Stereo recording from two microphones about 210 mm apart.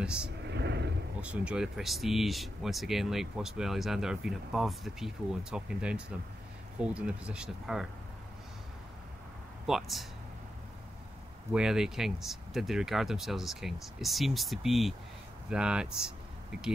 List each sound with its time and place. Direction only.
0.0 s speech: 5° right (ahead or behind)
0.5 s vehicle: 55° right (ahead or behind)
1.2 s speech: 5° right (ahead or behind)
9.7 s speech: centre (ahead or behind)
11.5 s speech: 5° right (ahead or behind)